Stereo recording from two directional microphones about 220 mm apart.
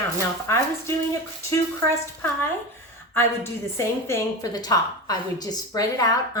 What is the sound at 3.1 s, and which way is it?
A woman's voice, 10° left (ahead or behind).